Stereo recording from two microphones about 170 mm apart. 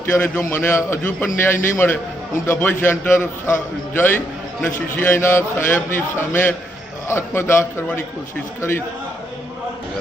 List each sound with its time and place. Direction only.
0.0 s a man's voice: 15° left (ahead or behind)